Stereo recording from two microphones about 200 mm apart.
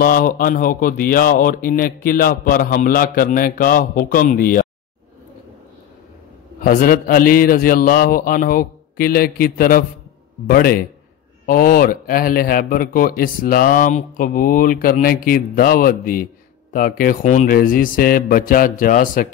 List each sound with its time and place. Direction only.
0.0 s a man's voice: 45° left (ahead or behind)
6.6 s a man's voice: 45° left (ahead or behind)